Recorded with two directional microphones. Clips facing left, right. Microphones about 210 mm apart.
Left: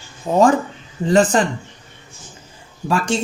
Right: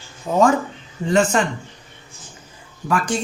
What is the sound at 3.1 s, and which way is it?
Speech, 25° left (ahead or behind).